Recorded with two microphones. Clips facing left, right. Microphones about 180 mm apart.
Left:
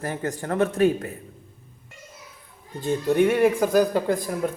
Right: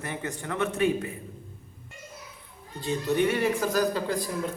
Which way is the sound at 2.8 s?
50° left (ahead or behind).